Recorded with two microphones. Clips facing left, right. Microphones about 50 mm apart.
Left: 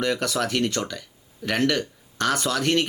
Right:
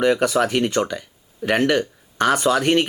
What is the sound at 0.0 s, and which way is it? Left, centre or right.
Speech, centre.